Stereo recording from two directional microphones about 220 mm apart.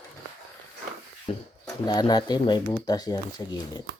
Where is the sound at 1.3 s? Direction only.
25° left (ahead or behind).